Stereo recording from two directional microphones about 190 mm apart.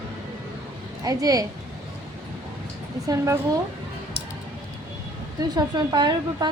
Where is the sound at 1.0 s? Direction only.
20° right (ahead or behind).